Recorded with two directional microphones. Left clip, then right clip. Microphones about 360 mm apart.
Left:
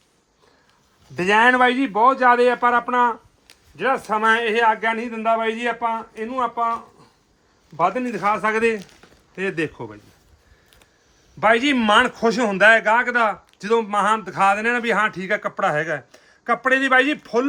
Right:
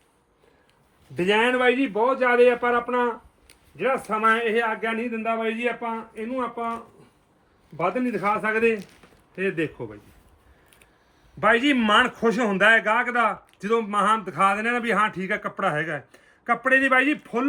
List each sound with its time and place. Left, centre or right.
1.1 s speech: centre
7.8 s speech: centre
11.3 s speech: centre